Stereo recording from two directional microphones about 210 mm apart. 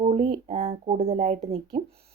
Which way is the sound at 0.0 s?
30° right (ahead or behind).